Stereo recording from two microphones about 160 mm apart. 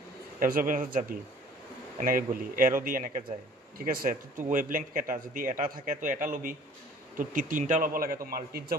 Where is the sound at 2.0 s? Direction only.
60° right (ahead or behind).